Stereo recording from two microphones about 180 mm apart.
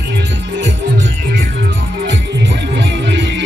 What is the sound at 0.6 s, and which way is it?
Music, 90° right.